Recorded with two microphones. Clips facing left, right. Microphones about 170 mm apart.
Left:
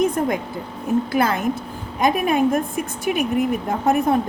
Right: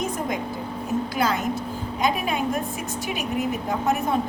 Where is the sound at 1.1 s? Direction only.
55° left (ahead or behind).